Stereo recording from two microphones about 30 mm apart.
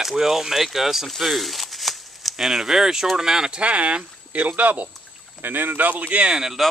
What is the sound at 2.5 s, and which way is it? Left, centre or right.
Speech, centre.